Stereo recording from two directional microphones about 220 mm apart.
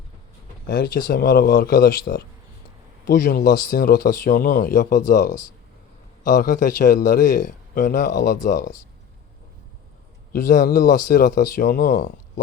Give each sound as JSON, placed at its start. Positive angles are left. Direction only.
{"t": 0.7, "sound": "a man's voice", "side_deg": 40}
{"t": 10.3, "sound": "a man's voice", "side_deg": 35}